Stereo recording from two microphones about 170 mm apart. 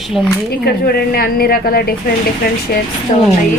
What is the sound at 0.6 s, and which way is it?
A woman's voice, 65° left (ahead or behind).